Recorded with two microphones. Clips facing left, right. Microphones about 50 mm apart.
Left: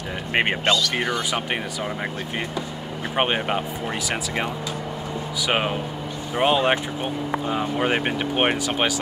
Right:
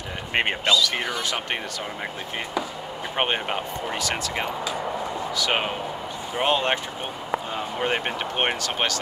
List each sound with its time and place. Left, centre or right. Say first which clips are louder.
0.3 s speech: left 2 dB; centre
0.7 s speech: even; left
1.3 s speech: left 3 dB; centre
3.2 s speech: left 3 dB; centre